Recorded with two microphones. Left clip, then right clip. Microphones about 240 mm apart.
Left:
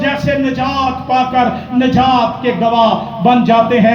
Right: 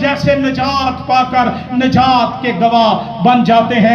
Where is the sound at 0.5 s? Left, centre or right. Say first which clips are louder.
Even; right.